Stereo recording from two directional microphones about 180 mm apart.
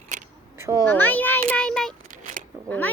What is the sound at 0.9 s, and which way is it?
A child's voice, 10° left (ahead or behind).